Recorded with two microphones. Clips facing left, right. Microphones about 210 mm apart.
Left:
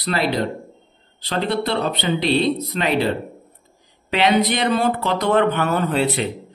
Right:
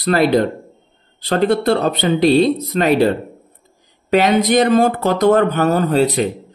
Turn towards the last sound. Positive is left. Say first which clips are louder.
# right 5 dB
turn(degrees=-40)  # may be behind; listen again after turning